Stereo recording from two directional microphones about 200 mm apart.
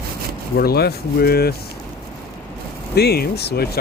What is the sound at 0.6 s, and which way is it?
Speech, 50° left (ahead or behind).